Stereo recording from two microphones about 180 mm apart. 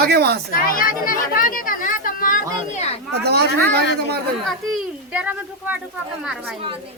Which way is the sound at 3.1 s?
65° right (ahead or behind).